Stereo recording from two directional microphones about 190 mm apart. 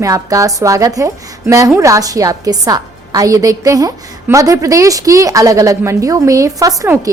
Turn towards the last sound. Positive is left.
turn(degrees=-15)  # may be behind; listen again after turning